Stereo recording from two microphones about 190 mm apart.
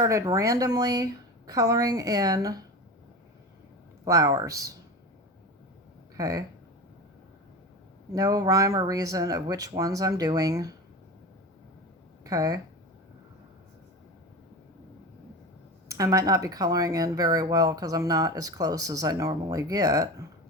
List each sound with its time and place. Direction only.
0.0 s speech: 15° right (ahead or behind)
4.0 s speech: 20° right (ahead or behind)
6.1 s speech: 20° right (ahead or behind)
8.1 s speech: 20° right (ahead or behind)
12.2 s speech: 20° right (ahead or behind)
15.9 s speech: 15° right (ahead or behind)